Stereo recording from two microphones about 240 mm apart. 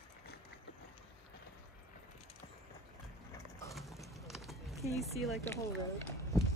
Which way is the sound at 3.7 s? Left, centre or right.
Centre.